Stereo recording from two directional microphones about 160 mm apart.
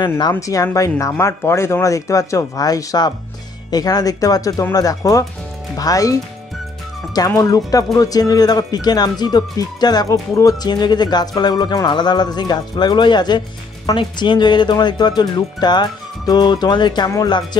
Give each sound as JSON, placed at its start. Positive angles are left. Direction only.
{"t": 0.3, "sound": "speech", "side_deg": 20}
{"t": 7.2, "sound": "speech", "side_deg": 20}